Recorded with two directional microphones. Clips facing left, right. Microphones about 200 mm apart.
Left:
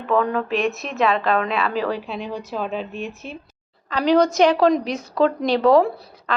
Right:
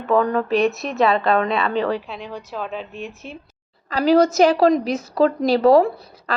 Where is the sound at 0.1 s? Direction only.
Centre (ahead or behind).